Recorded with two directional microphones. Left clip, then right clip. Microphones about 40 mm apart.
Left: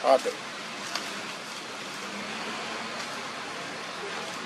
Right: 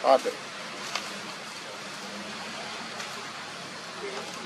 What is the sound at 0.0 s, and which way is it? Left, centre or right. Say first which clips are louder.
Speech: right 1 dB; centre.